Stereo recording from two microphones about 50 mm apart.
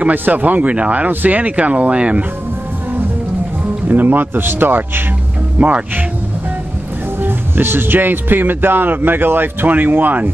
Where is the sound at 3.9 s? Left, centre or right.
Right.